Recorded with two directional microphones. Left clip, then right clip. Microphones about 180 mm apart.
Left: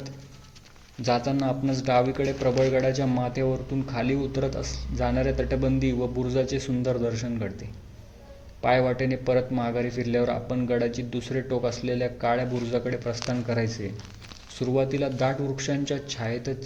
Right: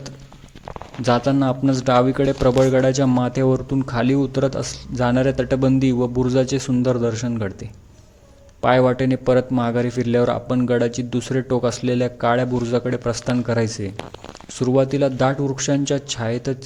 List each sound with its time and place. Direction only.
1.0 s a man's voice: 30° right (ahead or behind)
8.6 s a man's voice: 25° right (ahead or behind)